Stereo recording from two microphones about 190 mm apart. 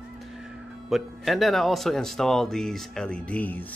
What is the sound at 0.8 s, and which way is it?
Speech, centre (ahead or behind).